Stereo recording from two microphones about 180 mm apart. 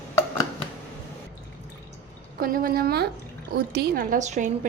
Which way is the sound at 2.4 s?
55° right (ahead or behind).